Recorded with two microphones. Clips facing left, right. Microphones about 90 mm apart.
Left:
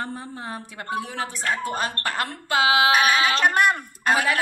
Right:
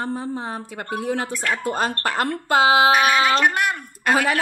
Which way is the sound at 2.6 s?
35° right (ahead or behind).